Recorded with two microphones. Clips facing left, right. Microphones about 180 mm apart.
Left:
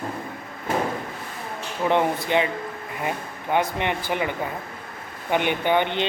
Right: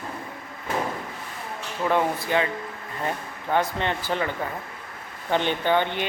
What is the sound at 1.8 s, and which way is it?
Speech, 20° left (ahead or behind).